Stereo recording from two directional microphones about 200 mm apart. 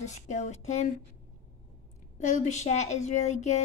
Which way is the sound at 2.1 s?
40° left (ahead or behind).